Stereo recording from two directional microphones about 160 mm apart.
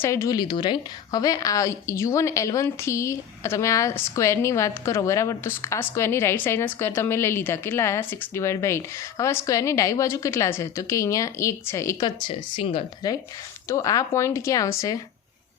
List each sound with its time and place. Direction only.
0.0 s a woman's voice: 20° left (ahead or behind)